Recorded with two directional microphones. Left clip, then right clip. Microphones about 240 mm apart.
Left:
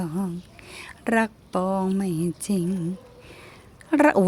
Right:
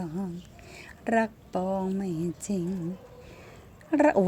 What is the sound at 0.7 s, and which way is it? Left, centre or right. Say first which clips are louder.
Speech: left 3 dB; centre.